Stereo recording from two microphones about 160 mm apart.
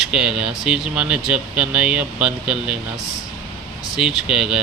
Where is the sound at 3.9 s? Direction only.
5° right (ahead or behind).